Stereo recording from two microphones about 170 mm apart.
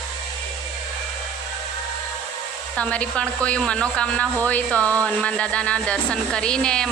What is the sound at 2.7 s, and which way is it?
A woman's voice, 5° left (ahead or behind).